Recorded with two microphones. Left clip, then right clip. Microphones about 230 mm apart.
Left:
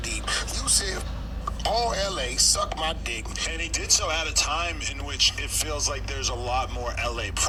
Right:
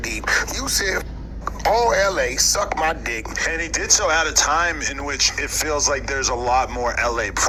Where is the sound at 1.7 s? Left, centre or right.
Right.